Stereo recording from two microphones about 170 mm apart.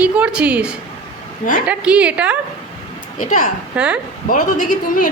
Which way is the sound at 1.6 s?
5° right (ahead or behind).